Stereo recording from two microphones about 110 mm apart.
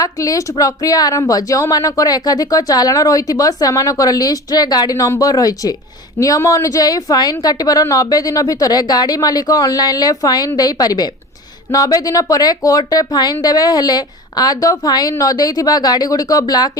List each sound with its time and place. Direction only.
0.0 s speech: 30° left (ahead or behind)